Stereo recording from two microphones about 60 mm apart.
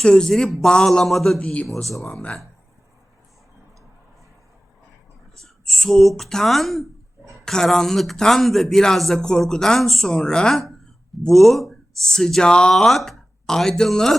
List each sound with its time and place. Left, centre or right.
0.0 s speech: centre
1.4 s speech: centre
5.4 s speech: centre
12.7 s speech: centre